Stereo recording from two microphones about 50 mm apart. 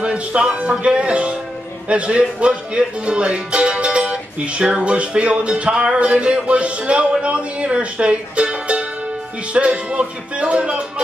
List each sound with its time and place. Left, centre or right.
0.0 s speech: right